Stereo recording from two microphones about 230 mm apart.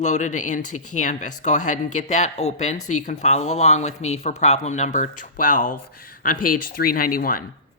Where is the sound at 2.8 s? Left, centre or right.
Left.